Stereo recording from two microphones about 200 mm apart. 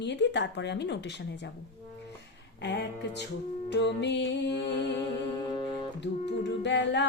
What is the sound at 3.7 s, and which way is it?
Speech, 60° left (ahead or behind).